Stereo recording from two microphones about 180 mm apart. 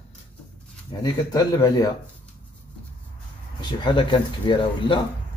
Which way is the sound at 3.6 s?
25° left (ahead or behind).